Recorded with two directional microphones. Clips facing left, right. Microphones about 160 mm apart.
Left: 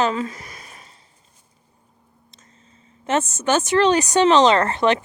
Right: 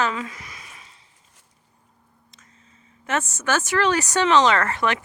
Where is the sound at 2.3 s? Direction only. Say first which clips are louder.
Left 2 dB; 30° left (ahead or behind).